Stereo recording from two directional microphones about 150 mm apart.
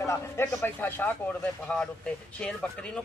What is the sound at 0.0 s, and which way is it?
Speech, 20° left (ahead or behind).